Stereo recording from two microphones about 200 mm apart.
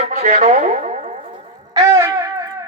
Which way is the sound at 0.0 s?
35° right (ahead or behind).